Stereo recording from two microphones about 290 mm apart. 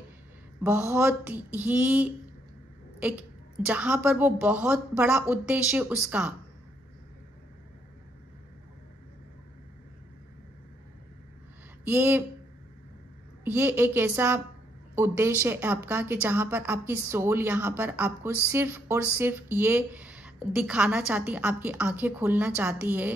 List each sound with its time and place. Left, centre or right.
0.7 s a woman's voice: centre
11.8 s a woman's voice: centre
13.4 s a woman's voice: centre